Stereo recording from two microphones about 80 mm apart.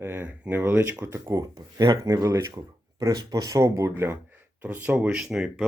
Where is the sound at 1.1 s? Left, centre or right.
Right.